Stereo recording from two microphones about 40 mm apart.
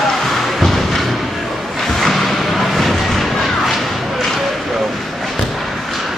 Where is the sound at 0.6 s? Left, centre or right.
Centre.